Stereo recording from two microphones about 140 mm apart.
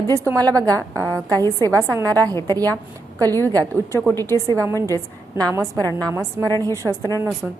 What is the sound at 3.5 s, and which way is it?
A woman's voice, 20° right (ahead or behind).